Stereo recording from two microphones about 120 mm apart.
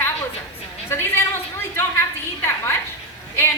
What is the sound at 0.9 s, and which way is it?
A woman's voice, 20° left (ahead or behind).